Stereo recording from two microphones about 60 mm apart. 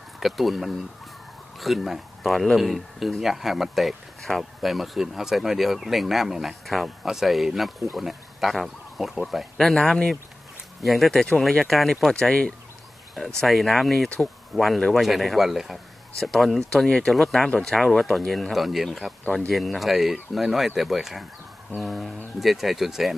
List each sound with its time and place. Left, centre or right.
0.2 s speech: centre
9.8 s speech: centre
10.8 s speech: centre
13.1 s speech: centre